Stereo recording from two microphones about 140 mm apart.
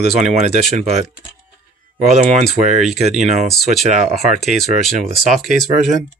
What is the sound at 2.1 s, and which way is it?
Speech, 55° right (ahead or behind).